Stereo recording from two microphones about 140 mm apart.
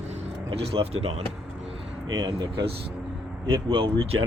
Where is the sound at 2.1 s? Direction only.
30° right (ahead or behind).